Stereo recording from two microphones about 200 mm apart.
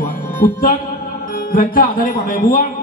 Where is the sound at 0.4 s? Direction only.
45° left (ahead or behind).